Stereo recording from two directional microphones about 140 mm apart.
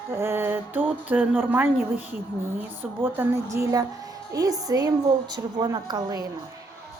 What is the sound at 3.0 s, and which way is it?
A woman's voice, 20° right (ahead or behind).